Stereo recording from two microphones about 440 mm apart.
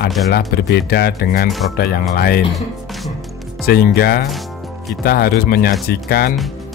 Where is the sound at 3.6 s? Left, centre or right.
Left.